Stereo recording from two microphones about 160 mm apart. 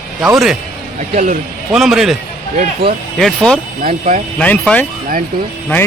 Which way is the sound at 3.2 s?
5° left (ahead or behind).